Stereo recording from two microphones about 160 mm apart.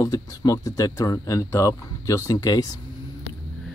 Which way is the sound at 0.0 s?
25° left (ahead or behind).